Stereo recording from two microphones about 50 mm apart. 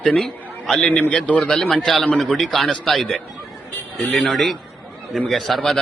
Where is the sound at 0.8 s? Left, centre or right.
Left.